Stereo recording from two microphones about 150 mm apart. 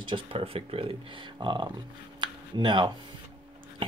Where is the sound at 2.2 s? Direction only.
30° right (ahead or behind).